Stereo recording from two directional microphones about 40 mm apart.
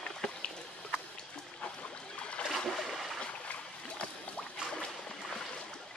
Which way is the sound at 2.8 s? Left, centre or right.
Centre.